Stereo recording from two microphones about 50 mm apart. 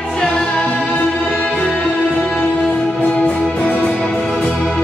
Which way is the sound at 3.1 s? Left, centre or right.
Left.